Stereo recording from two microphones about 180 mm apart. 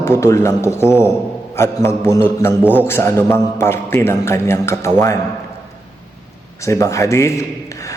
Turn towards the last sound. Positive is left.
turn(degrees=15)  # may be behind; listen again after turning